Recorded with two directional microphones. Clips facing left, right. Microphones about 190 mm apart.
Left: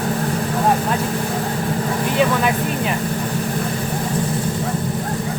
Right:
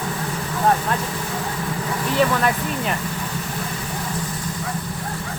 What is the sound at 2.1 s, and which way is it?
Speech, 5° left (ahead or behind).